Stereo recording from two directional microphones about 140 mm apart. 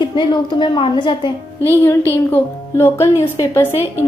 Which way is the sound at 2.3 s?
15° left (ahead or behind).